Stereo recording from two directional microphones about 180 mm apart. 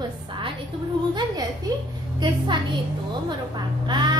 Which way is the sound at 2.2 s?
25° right (ahead or behind).